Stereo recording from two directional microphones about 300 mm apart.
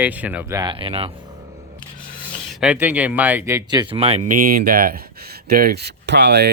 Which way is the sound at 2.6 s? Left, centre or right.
Centre.